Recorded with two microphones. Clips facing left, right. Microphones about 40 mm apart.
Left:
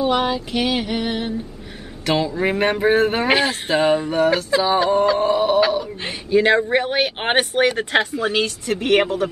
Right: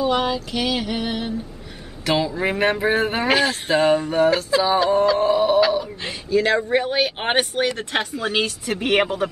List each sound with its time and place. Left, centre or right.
0.1 s speech: centre
6.0 s speech: left
8.1 s speech: centre
8.4 s a woman's voice: centre